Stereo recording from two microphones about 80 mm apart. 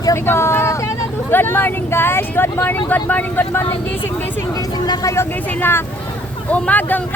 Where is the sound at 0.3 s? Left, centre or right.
Left.